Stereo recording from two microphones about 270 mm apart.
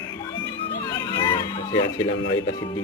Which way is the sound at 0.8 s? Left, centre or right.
Centre.